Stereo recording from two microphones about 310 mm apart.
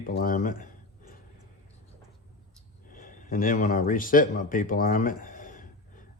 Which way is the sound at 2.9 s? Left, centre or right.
Left.